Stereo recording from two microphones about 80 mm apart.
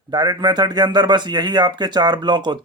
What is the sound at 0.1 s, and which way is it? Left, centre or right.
A man's voice, right.